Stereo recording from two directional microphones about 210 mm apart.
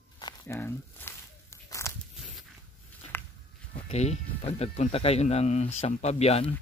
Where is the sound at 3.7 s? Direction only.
30° left (ahead or behind).